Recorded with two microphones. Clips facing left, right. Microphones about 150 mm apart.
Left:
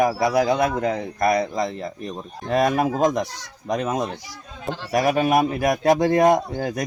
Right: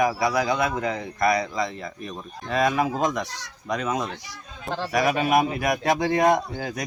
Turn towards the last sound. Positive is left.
turn(degrees=45)  # may be behind; listen again after turning